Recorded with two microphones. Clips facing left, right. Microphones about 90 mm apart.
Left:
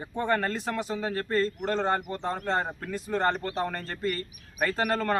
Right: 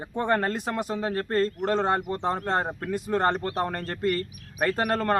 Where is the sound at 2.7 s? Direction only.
55° right (ahead or behind).